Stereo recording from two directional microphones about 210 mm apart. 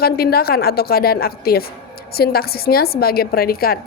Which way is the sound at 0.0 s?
45° left (ahead or behind).